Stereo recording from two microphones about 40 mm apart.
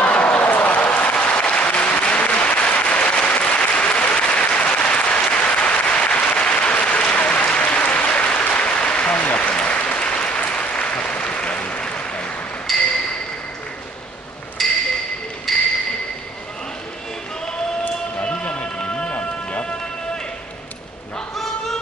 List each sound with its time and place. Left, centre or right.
0.0 s applause: left
0.4 s applause: left
1.1 s applause: left
12.7 s ping: centre
14.6 s ping: centre
15.5 s a sound: centre
18.2 s vehicle: left
18.8 s a sound: left